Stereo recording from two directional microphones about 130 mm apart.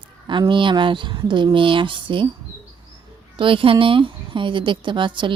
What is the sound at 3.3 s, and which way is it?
Speech, 40° right (ahead or behind).